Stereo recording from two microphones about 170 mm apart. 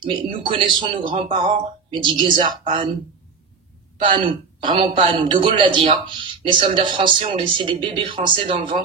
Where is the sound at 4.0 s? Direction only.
30° right (ahead or behind).